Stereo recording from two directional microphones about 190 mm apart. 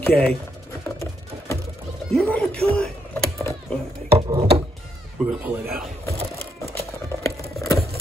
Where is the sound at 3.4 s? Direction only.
15° left (ahead or behind).